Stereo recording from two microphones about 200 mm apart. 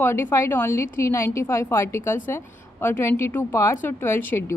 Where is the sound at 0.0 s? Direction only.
15° left (ahead or behind).